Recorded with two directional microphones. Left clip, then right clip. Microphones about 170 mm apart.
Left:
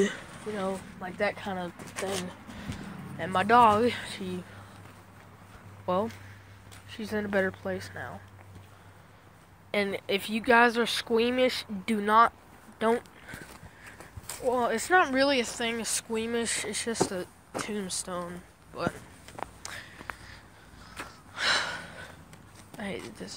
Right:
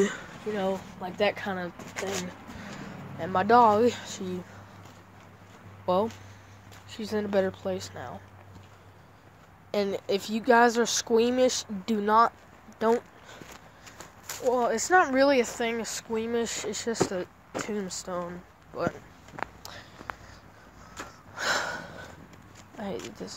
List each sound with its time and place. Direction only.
0.6 s speech: 20° right (ahead or behind)
3.2 s speech: centre (ahead or behind)
5.9 s speech: 10° right (ahead or behind)
6.9 s speech: centre (ahead or behind)
9.7 s speech: 5° right (ahead or behind)
14.5 s speech: 10° left (ahead or behind)
15.0 s speech: centre (ahead or behind)
15.7 s speech: 15° left (ahead or behind)
16.3 s speech: 5° left (ahead or behind)
19.6 s a sound: 5° right (ahead or behind)
20.1 s a sound: 20° left (ahead or behind)
21.4 s gasp: 10° right (ahead or behind)
22.8 s speech: 5° right (ahead or behind)